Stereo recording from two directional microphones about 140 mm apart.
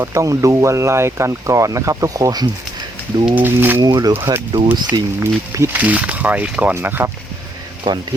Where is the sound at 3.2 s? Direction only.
10° right (ahead or behind).